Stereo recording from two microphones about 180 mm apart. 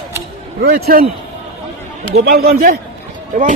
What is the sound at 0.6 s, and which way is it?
Speech, 60° right (ahead or behind).